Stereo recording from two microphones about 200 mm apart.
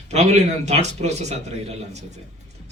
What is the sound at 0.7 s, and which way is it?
A man's voice, 35° right (ahead or behind).